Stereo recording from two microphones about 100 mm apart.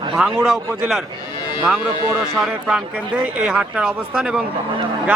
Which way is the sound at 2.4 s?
10° right (ahead or behind).